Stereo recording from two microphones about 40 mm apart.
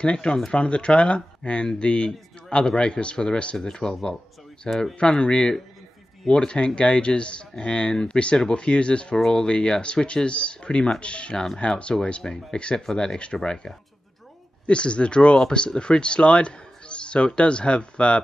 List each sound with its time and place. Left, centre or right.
0.0 s speech: left
12.5 s speech: left
12.8 s speech: centre
14.7 s speech: left